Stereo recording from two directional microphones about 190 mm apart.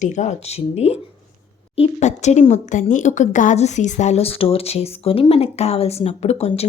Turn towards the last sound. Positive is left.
turn(degrees=30)  # may be behind; listen again after turning